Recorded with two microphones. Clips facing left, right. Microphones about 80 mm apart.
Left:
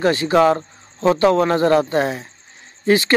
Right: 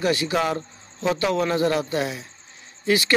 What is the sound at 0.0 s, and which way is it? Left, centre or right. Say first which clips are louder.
Speech: left 7 dB; left.